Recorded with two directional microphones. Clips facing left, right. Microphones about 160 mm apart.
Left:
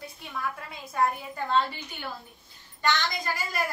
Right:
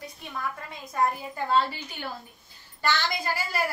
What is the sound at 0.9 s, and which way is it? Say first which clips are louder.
Speech: even; 5° right (ahead or behind).